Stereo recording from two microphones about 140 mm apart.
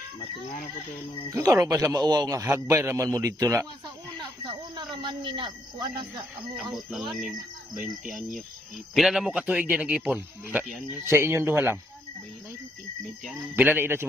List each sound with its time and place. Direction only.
1.3 s a man's voice: 25° right (ahead or behind)
4.7 s speech: 30° right (ahead or behind)
6.7 s speech: centre (ahead or behind)
9.0 s speech: centre (ahead or behind)
13.6 s speech: 15° right (ahead or behind)